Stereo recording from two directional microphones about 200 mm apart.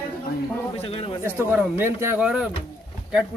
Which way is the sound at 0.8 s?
30° left (ahead or behind).